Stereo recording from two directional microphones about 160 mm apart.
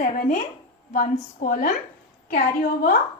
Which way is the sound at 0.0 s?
55° left (ahead or behind).